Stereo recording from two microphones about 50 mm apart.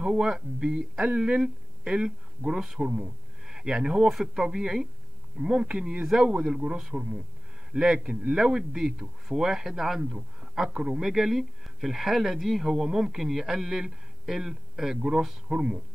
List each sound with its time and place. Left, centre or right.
0.0 s speech: centre
10.4 s a sound: centre
10.8 s speech: centre